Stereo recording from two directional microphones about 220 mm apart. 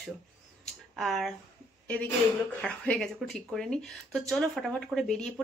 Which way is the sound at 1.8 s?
5° left (ahead or behind).